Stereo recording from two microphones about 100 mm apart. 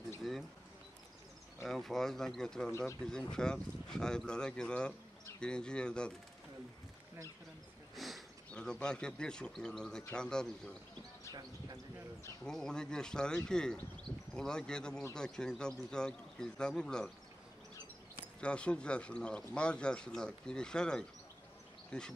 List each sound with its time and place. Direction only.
0.2 s a sound: centre (ahead or behind)
1.6 s speech: centre (ahead or behind)
7.9 s a sound: centre (ahead or behind)
8.5 s speech: 10° left (ahead or behind)
11.3 s speech: 40° right (ahead or behind)
12.4 s speech: 5° left (ahead or behind)
18.4 s speech: 10° left (ahead or behind)